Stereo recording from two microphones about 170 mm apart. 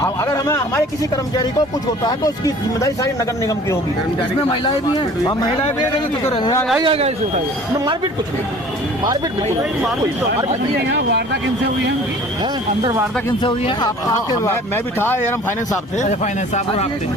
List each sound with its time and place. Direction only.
0.0 s speech: 20° left (ahead or behind)
4.9 s speech: 25° left (ahead or behind)
6.7 s speech: 30° right (ahead or behind)
10.8 s speech: 85° right
12.8 s speech: 20° right (ahead or behind)
13.4 s speech: 30° left (ahead or behind)
16.0 s speech: 45° left (ahead or behind)